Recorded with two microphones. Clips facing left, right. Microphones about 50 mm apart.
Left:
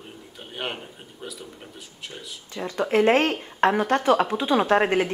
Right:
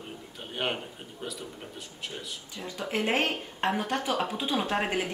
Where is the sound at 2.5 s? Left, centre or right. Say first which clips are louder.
Left 10 dB; left.